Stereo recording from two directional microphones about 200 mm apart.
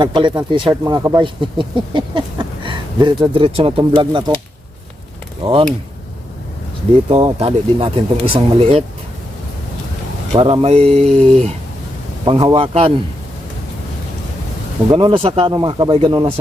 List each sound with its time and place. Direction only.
0.0 s speech: 25° right (ahead or behind)
5.4 s speech: 25° right (ahead or behind)
7.1 s speech: 30° right (ahead or behind)
10.3 s speech: 25° right (ahead or behind)
12.2 s speech: 20° right (ahead or behind)
14.8 s speech: 25° right (ahead or behind)